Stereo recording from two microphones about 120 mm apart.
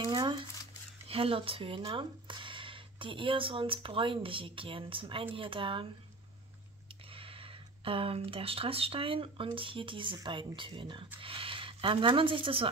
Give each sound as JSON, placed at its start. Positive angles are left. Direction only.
{"t": 0.0, "sound": "speech", "side_deg": -40}
{"t": 1.0, "sound": "speech", "side_deg": -50}
{"t": 7.1, "sound": "speech", "side_deg": -50}